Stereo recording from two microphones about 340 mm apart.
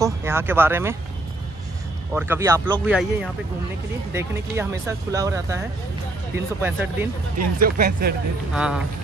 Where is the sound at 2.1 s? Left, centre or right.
Centre.